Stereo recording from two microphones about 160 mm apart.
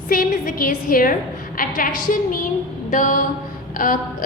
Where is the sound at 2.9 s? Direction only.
55° left (ahead or behind).